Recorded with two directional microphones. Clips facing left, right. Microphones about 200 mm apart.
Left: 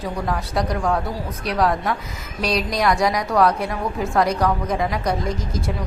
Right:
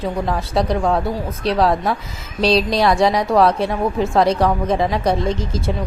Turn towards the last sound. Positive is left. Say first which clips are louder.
# right 4 dB
turn(degrees=-25)  # may be behind; listen again after turning